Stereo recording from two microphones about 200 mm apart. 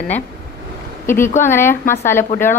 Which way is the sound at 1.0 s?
10° left (ahead or behind).